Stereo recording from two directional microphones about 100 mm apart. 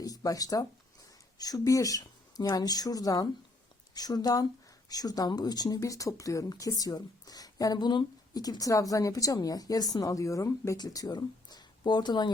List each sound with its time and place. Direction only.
0.0 s speech: 40° left (ahead or behind)